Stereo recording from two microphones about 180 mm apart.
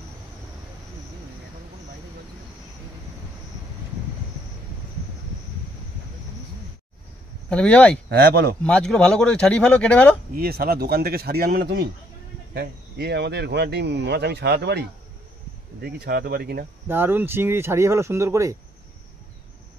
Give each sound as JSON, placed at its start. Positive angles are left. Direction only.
{"t": 7.4, "sound": "speech", "side_deg": 5}
{"t": 8.1, "sound": "speech", "side_deg": -60}
{"t": 8.6, "sound": "speech", "side_deg": 5}
{"t": 10.3, "sound": "speech", "side_deg": -55}
{"t": 16.8, "sound": "speech", "side_deg": -10}